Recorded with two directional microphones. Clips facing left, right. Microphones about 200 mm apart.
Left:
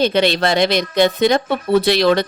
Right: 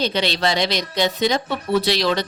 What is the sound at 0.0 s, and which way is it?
Speech, 55° left (ahead or behind).